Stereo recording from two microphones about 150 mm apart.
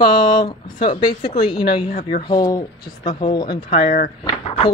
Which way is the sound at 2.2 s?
25° left (ahead or behind).